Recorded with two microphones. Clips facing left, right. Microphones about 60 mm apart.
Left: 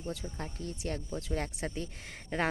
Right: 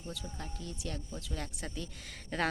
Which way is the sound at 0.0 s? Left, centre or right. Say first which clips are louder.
Left 4 dB; left.